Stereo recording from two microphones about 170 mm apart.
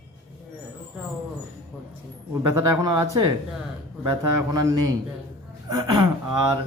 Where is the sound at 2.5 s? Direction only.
20° right (ahead or behind).